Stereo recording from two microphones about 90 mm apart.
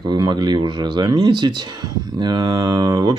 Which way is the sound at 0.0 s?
55° right (ahead or behind).